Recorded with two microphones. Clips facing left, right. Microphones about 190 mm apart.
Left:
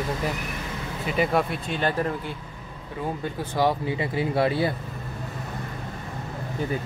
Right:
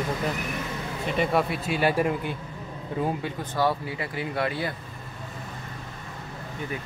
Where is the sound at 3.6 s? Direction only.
20° left (ahead or behind).